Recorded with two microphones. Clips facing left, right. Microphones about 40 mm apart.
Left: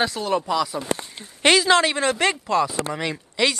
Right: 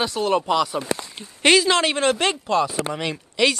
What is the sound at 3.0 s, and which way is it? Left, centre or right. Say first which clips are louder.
Speech: right 2 dB; right.